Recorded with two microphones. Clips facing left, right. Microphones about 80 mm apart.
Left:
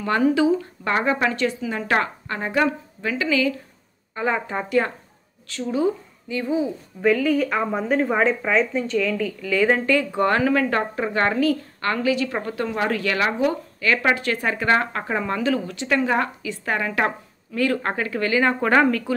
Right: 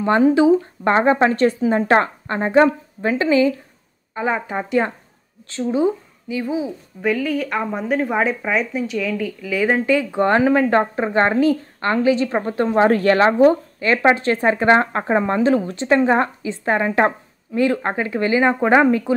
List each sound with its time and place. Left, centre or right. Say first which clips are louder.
0.0 s speech: right 5 dB; right
4.1 s speech: right 2 dB; centre
6.3 s a woman's voice: even; centre